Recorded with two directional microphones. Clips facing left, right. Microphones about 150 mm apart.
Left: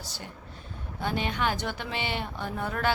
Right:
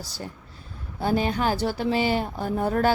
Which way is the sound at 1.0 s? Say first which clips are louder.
Right 6 dB; 35° right (ahead or behind).